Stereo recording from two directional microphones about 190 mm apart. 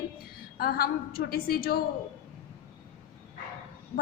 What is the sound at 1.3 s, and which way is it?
Speech, 50° left (ahead or behind).